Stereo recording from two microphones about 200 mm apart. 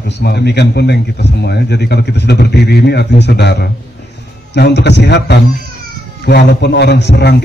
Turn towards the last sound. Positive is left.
turn(degrees=60)  # may be behind; listen again after turning